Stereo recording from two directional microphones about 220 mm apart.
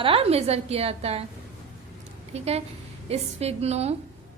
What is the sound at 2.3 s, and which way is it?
A woman's voice, 30° right (ahead or behind).